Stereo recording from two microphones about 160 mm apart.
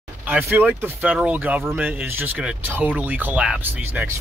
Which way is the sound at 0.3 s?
10° right (ahead or behind).